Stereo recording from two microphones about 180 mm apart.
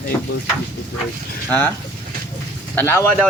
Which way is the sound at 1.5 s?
10° left (ahead or behind).